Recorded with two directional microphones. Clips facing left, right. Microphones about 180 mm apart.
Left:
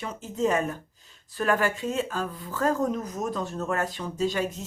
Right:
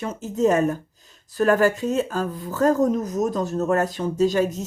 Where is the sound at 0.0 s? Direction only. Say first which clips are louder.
Right 6 dB; 45° right (ahead or behind).